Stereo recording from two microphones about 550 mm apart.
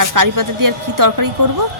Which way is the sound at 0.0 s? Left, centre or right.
Right.